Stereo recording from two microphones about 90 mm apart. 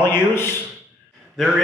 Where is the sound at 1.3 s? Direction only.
Centre (ahead or behind).